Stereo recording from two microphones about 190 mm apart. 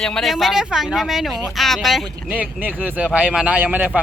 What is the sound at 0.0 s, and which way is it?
Speech, centre (ahead or behind).